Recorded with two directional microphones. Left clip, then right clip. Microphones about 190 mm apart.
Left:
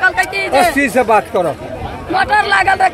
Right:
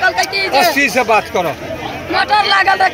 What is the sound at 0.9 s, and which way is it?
Speech, 50° left (ahead or behind).